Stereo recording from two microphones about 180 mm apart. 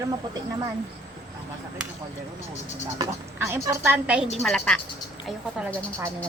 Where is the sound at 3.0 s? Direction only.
15° right (ahead or behind).